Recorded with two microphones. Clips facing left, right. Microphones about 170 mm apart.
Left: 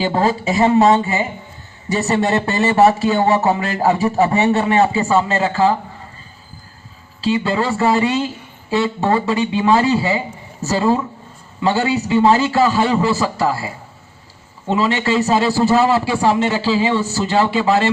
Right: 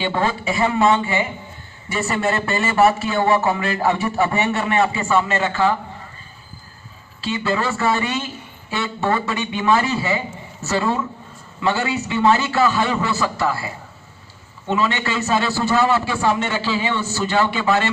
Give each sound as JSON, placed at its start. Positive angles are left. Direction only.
{"t": 0.0, "sound": "speech", "side_deg": 35}
{"t": 7.2, "sound": "speech", "side_deg": 35}